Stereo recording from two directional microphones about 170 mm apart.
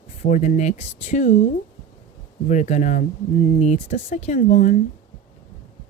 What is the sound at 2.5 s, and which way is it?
Speech, 45° left (ahead or behind).